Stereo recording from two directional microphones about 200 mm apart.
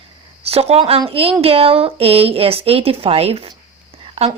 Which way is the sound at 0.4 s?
30° right (ahead or behind).